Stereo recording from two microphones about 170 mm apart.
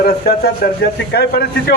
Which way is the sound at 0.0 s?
65° left (ahead or behind).